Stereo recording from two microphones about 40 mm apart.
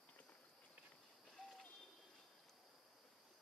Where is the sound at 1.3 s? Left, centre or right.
Centre.